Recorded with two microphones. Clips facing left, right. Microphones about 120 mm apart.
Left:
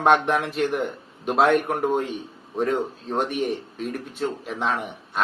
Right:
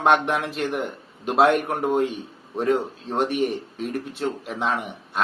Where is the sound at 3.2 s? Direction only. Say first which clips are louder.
Right 2 dB; 55° right (ahead or behind).